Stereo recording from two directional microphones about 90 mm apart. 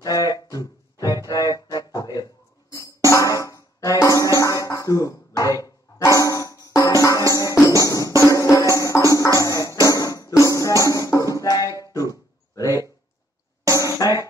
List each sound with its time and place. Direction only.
0.0 s music: 45° left (ahead or behind)
9.8 s drum: 40° left (ahead or behind)
10.8 s music: 40° left (ahead or behind)
12.5 s a sound: 40° left (ahead or behind)
14.0 s music: 45° left (ahead or behind)